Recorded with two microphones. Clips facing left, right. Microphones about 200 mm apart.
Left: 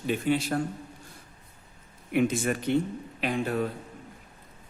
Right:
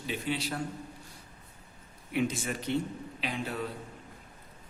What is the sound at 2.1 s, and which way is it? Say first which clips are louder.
A man's voice: left 6 dB; 55° left (ahead or behind).